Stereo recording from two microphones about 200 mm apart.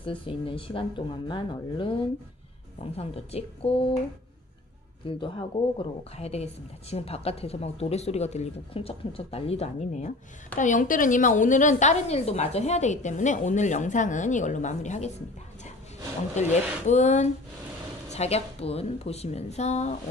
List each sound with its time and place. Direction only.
0.0 s speech: 25° left (ahead or behind)
5.0 s a woman's voice: 25° left (ahead or behind)
16.3 s a woman's voice: 35° left (ahead or behind)